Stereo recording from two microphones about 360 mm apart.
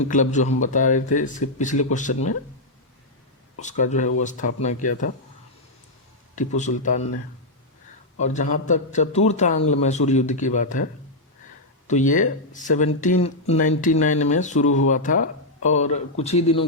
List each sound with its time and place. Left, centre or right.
0.0 s speech: centre
3.6 s speech: centre
6.6 s speech: centre
8.2 s speech: centre
11.9 s speech: left